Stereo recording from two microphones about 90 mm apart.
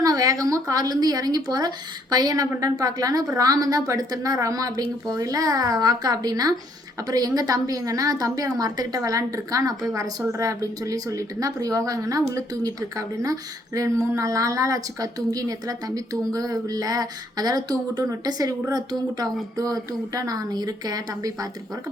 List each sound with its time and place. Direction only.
0.0 s a woman's voice: 40° right (ahead or behind)